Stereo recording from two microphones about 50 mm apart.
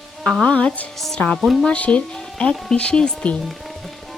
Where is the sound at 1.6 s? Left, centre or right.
Left.